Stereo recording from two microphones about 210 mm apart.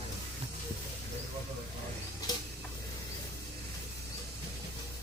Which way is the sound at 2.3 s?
20° left (ahead or behind).